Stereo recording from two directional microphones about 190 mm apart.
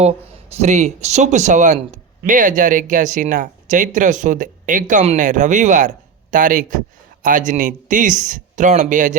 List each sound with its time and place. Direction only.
0.5 s speech: 35° right (ahead or behind)